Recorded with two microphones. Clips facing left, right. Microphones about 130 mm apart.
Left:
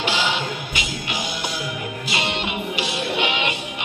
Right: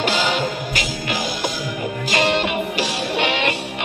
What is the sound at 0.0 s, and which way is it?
Music, 45° right (ahead or behind).